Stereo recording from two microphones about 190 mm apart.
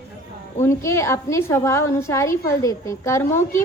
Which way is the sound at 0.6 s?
15° left (ahead or behind).